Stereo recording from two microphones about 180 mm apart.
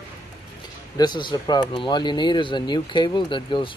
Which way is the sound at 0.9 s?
25° left (ahead or behind).